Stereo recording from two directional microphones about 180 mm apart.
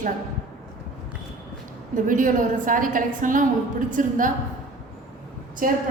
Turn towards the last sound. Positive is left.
turn(degrees=-50)  # may be behind; listen again after turning